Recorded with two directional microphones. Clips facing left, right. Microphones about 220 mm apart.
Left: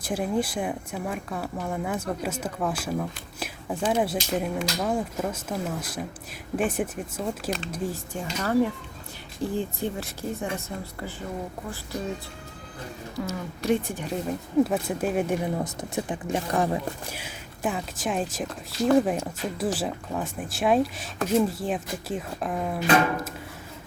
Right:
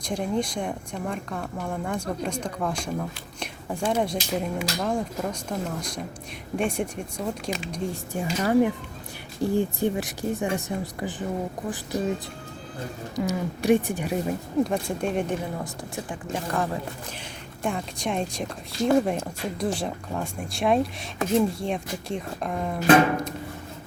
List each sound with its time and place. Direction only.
0.0 s speech: 5° left (ahead or behind)
8.1 s speech: 15° right (ahead or behind)
13.1 s speech: 15° right (ahead or behind)
14.6 s speech: 5° left (ahead or behind)
15.6 s speech: 20° left (ahead or behind)
17.2 s speech: 5° left (ahead or behind)